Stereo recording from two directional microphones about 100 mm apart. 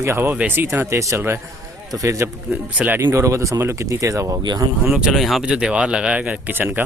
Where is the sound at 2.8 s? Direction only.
20° right (ahead or behind).